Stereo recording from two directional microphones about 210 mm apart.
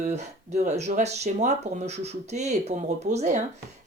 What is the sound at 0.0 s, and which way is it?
Speech, 30° right (ahead or behind).